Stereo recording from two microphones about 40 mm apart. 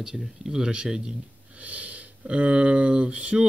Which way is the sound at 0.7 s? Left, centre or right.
Right.